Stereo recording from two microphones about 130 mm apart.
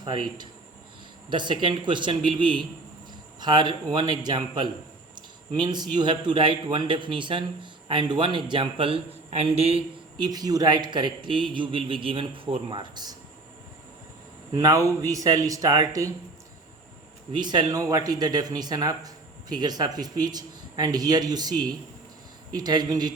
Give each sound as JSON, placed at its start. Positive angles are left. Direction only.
{"t": 0.0, "sound": "speech", "side_deg": -35}
{"t": 10.2, "sound": "speech", "side_deg": -30}
{"t": 14.5, "sound": "a man's voice", "side_deg": -25}
{"t": 17.3, "sound": "speech", "side_deg": -35}